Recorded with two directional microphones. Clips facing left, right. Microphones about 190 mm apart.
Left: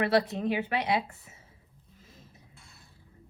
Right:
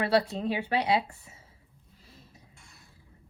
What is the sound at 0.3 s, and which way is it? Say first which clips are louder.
Speech: even; 30° right (ahead or behind).